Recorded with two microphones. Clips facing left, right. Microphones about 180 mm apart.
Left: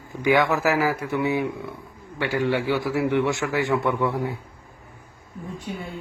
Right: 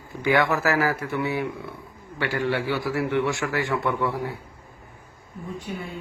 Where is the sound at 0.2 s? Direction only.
15° left (ahead or behind).